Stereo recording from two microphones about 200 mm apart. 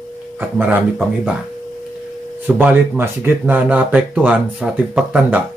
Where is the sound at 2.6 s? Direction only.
10° right (ahead or behind).